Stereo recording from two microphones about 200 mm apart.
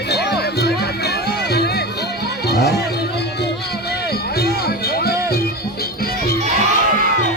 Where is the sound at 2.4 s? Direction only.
55° left (ahead or behind).